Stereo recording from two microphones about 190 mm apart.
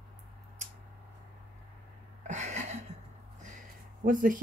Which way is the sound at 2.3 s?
35° right (ahead or behind).